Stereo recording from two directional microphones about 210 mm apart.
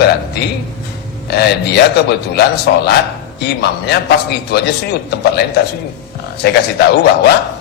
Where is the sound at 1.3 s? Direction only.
50° left (ahead or behind).